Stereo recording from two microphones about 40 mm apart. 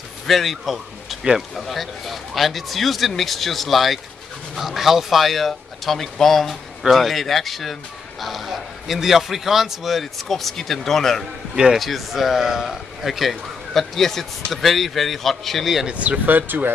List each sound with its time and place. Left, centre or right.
0.3 s a man's voice: centre
15.9 s speech: right
16.3 s speech: right